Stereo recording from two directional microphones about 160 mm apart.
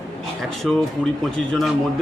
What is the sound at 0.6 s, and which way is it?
Speech, 5° right (ahead or behind).